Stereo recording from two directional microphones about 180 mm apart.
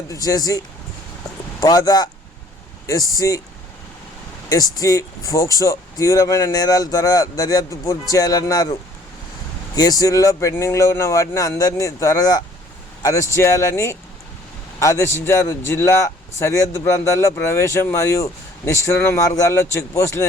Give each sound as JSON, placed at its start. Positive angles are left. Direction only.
{"t": 0.1, "sound": "speech", "side_deg": 20}
{"t": 1.6, "sound": "speech", "side_deg": 20}
{"t": 4.4, "sound": "speech", "side_deg": 20}